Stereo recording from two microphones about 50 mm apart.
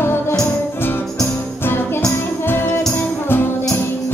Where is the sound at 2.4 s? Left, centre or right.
Left.